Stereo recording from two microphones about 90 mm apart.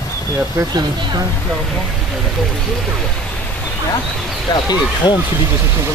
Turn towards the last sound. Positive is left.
turn(degrees=50)  # may be behind; listen again after turning